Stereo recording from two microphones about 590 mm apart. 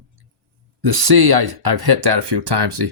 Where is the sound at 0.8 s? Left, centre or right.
Right.